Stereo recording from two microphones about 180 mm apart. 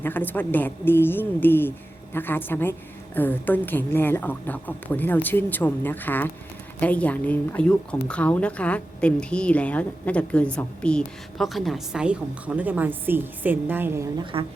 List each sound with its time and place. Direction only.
0.0 s a woman's voice: 10° left (ahead or behind); by 14.1 s 10° right (ahead or behind)
14.3 s speech: 30° right (ahead or behind)